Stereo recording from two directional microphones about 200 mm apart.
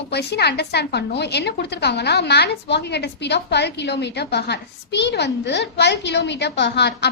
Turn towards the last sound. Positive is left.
turn(degrees=55)  # may be behind; listen again after turning